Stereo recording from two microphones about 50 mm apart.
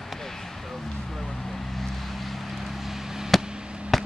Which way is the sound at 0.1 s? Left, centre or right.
Centre.